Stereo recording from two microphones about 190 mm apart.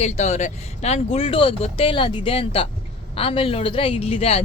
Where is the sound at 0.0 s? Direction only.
35° left (ahead or behind).